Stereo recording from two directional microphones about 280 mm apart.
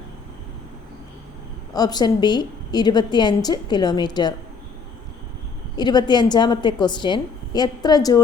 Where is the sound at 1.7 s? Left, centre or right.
Centre.